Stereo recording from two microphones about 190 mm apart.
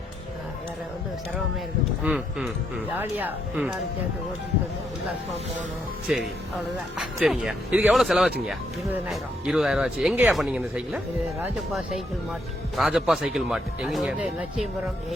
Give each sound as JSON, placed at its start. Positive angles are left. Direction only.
{"t": 2.0, "sound": "speech", "side_deg": 0}
{"t": 6.1, "sound": "speech", "side_deg": -5}